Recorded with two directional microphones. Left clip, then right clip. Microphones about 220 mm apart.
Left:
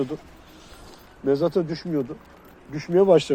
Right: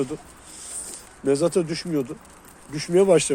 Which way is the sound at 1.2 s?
10° right (ahead or behind).